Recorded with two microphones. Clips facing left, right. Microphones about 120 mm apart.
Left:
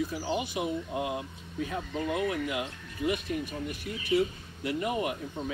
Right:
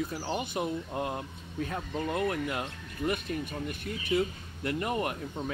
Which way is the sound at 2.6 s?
45° right (ahead or behind).